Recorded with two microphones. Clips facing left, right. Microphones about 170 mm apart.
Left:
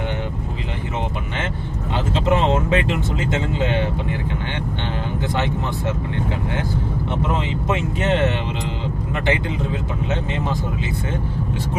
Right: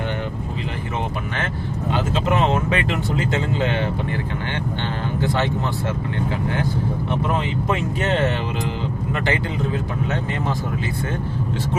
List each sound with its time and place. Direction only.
1.9 s speech: 25° left (ahead or behind)
7.7 s speech: 15° left (ahead or behind)